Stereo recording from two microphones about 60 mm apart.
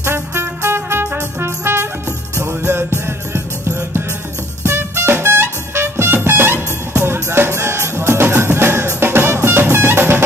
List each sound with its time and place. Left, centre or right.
0.0 s music: right